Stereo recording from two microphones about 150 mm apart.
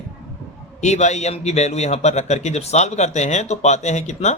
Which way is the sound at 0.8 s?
50° left (ahead or behind).